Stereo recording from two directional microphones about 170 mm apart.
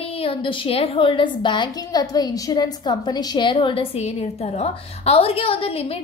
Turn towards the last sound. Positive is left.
turn(degrees=35)  # may be behind; listen again after turning